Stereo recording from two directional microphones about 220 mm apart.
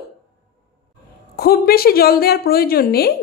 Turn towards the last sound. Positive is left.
turn(degrees=45)  # may be behind; listen again after turning